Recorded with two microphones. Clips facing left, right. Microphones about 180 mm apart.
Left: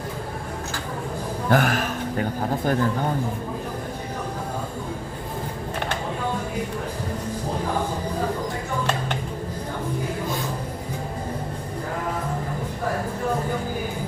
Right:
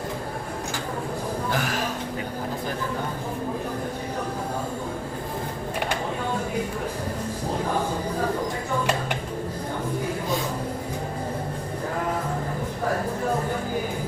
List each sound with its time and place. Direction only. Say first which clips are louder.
1.5 s a man's voice: left 9 dB; 55° left (ahead or behind)